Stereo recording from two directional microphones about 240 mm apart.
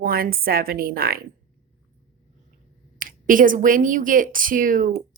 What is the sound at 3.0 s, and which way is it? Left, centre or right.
A woman's voice, right.